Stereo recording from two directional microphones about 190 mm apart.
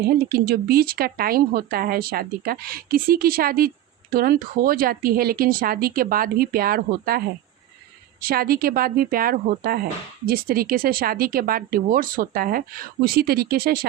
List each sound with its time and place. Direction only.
0.3 s speech: 55° right (ahead or behind)
8.2 s speech: 55° right (ahead or behind)